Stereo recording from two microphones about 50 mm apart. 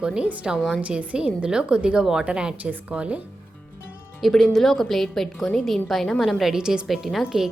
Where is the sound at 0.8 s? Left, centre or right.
Right.